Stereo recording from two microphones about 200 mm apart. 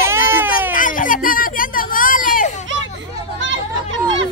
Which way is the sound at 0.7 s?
40° left (ahead or behind).